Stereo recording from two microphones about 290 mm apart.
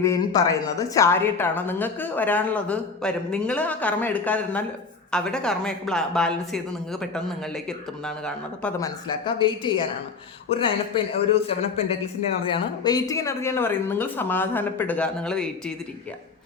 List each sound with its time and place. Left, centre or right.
0.0 s speech: centre
9.0 s a woman's voice: centre